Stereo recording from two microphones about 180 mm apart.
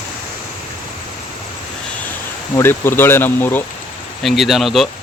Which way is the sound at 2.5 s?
15° left (ahead or behind).